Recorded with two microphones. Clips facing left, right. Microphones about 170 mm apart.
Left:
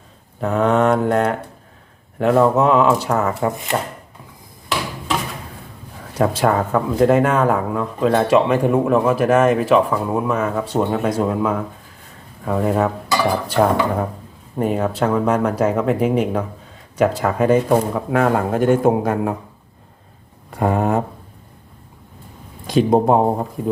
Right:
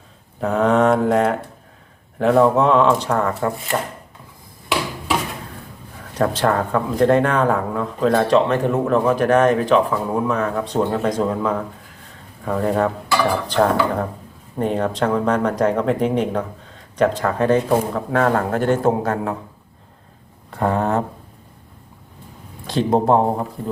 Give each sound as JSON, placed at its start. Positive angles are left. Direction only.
{"t": 0.3, "sound": "speech", "side_deg": 0}
{"t": 6.1, "sound": "speech", "side_deg": 10}
{"t": 20.5, "sound": "speech", "side_deg": 10}
{"t": 22.6, "sound": "speech", "side_deg": 10}